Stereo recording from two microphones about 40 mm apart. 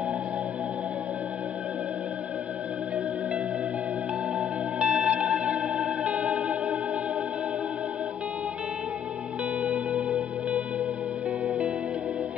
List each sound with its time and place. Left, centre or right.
4.8 s music: right
5.1 s music: right
9.6 s music: right